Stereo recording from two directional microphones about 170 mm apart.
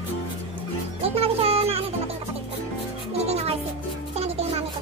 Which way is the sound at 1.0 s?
35° right (ahead or behind).